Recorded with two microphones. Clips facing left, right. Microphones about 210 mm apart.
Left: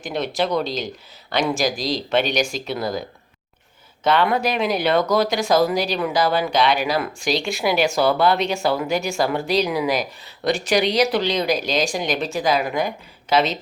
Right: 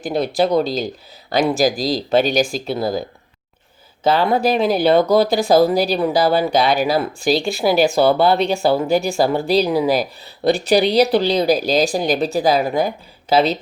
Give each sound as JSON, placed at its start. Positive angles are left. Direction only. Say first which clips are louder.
{"t": 0.0, "sound": "speech", "louder": "right 5 dB", "side_deg": -35}
{"t": 4.0, "sound": "speech", "louder": "right 3 dB", "side_deg": -30}